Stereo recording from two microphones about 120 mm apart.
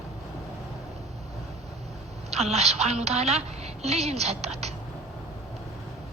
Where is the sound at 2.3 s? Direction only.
60° right (ahead or behind).